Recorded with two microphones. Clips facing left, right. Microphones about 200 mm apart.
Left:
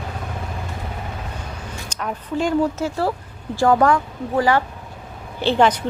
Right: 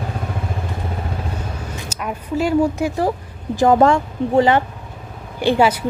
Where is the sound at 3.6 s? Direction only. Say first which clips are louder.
Right 3 dB; 20° right (ahead or behind).